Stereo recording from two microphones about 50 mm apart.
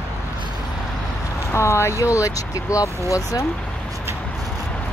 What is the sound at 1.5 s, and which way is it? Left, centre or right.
Speech, left.